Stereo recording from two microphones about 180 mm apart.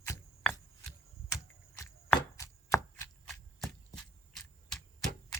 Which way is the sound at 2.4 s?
15° left (ahead or behind).